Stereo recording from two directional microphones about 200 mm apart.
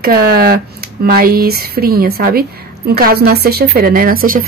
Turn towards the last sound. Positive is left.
turn(degrees=-45)  # may be behind; listen again after turning